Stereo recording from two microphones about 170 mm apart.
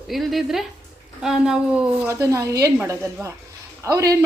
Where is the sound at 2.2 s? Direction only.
20° right (ahead or behind).